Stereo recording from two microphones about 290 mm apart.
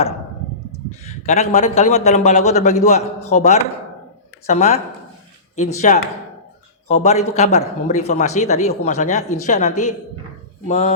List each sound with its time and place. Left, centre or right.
1.0 s a man's voice: left